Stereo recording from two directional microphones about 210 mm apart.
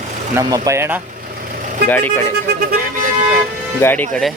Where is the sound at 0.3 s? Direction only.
15° right (ahead or behind).